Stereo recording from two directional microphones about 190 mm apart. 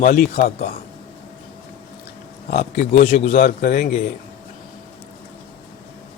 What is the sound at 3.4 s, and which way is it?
Speech, 50° left (ahead or behind).